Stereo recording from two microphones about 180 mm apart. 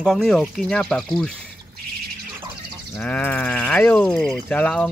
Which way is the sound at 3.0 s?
10° left (ahead or behind).